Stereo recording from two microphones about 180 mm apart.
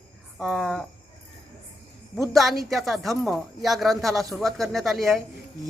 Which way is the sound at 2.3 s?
Centre (ahead or behind).